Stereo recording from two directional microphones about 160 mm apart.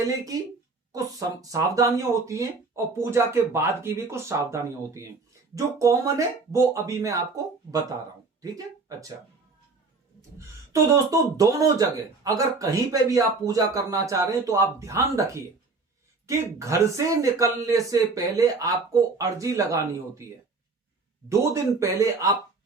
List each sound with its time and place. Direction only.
0.9 s speech: 20° right (ahead or behind)
10.2 s speech: 20° right (ahead or behind)
21.2 s speech: 20° right (ahead or behind)